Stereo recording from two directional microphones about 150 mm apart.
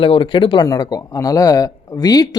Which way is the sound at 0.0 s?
35° left (ahead or behind).